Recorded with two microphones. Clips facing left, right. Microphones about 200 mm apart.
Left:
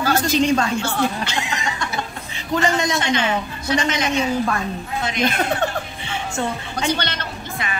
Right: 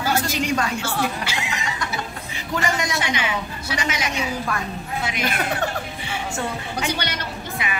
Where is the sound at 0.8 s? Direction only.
5° right (ahead or behind).